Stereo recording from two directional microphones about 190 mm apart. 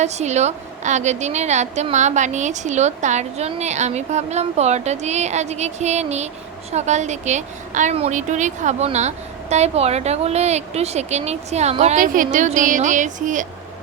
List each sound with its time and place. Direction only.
0.0 s a woman's voice: 35° right (ahead or behind)